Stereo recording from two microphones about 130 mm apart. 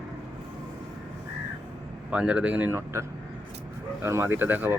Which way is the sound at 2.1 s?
10° right (ahead or behind).